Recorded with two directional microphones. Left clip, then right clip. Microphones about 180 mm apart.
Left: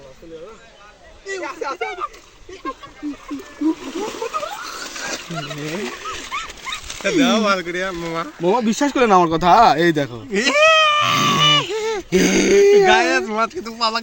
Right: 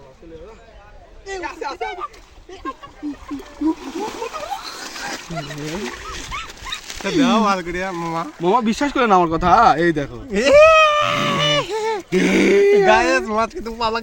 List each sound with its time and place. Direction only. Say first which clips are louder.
1.4 s speech: left 1 dB; centre (ahead or behind)
3.9 s a sound: left 2 dB; 15° right (ahead or behind)
5.0 s speech: left 1 dB; 15° right (ahead or behind)
6.3 s dog: left 1 dB; centre (ahead or behind)
7.2 s speech: right 1 dB; 75° right (ahead or behind)
8.4 s speech: even; 10° left (ahead or behind); by 10.2 s 30° left (ahead or behind)
10.3 s speech: right 3 dB; 60° right (ahead or behind)
11.1 s speech: left 3 dB; 30° left (ahead or behind)
11.5 s a sound: left 1 dB; 65° right (ahead or behind)
12.1 s speech: left 1 dB; 25° left (ahead or behind)
12.8 s speech: even; 75° right (ahead or behind); by 14.0 s 50° right (ahead or behind)